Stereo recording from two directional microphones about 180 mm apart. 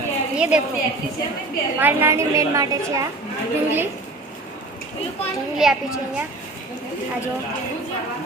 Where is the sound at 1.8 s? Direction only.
15° right (ahead or behind).